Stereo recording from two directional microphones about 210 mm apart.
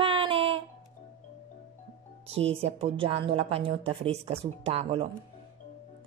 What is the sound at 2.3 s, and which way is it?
A woman's voice, 25° right (ahead or behind).